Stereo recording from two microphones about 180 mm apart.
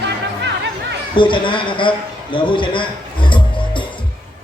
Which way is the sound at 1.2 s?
25° left (ahead or behind).